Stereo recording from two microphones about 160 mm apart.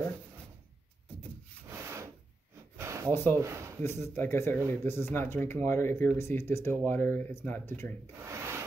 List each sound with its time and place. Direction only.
1.7 s rub: 15° right (ahead or behind)
2.8 s a sound: 20° right (ahead or behind)
3.3 s speech: 15° right (ahead or behind)
3.8 s speech: 15° left (ahead or behind)
8.2 s wood: 15° right (ahead or behind)